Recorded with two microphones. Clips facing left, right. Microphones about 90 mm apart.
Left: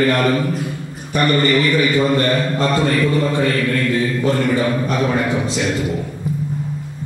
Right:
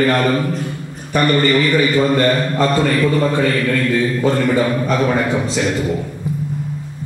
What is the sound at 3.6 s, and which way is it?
Mantra, 45° right (ahead or behind).